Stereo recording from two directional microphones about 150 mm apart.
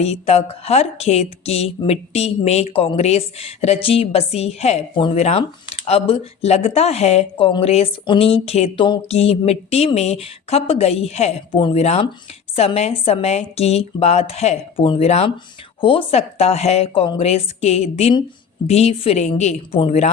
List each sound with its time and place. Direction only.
0.0 s speech: 45° left (ahead or behind)